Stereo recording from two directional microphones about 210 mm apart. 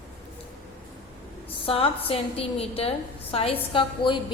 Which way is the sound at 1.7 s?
25° left (ahead or behind).